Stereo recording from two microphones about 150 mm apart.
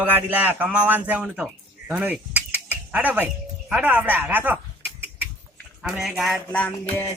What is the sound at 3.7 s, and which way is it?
Speech, 10° right (ahead or behind).